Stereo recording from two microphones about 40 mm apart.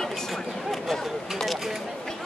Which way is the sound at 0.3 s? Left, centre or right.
Centre.